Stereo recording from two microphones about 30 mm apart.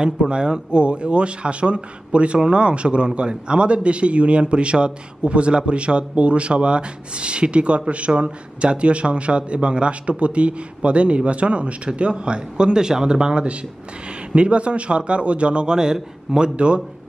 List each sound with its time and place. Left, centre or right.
0.3 s a man's voice: right
16.5 s a man's voice: right